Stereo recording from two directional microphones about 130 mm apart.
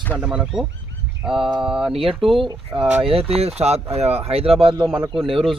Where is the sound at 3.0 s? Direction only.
50° right (ahead or behind).